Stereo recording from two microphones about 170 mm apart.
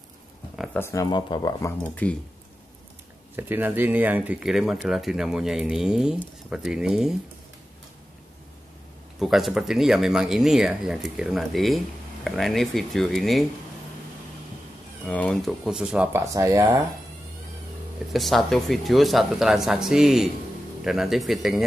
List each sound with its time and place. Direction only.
0.7 s speech: 15° left (ahead or behind)
1.8 s speech: 10° left (ahead or behind)
3.3 s speech: 10° right (ahead or behind)
9.2 s speech: centre (ahead or behind)
15.0 s speech: 5° left (ahead or behind)
16.2 s speech: 20° right (ahead or behind)
18.1 s speech: centre (ahead or behind)